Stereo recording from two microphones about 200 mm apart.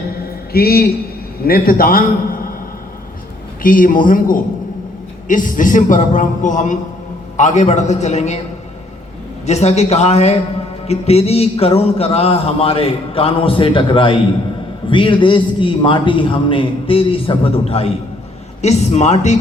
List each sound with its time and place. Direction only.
0.5 s a man's voice: 50° left (ahead or behind)
3.6 s a man's voice: 45° left (ahead or behind)
9.5 s a man's voice: 35° left (ahead or behind)